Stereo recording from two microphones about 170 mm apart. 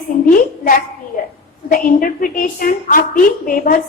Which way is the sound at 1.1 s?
50° left (ahead or behind).